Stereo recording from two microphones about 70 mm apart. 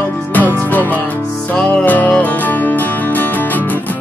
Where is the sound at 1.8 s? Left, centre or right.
Left.